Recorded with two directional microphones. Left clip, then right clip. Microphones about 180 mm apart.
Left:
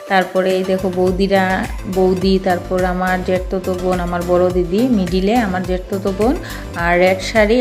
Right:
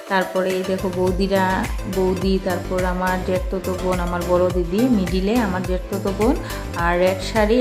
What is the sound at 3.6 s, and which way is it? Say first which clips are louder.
Speech: left 4 dB; 5° left (ahead or behind).